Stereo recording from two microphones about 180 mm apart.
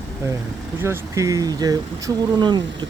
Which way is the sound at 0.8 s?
15° right (ahead or behind).